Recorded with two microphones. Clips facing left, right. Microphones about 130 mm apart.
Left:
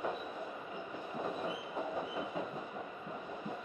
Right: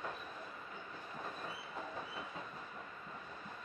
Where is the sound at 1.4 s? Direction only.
15° left (ahead or behind).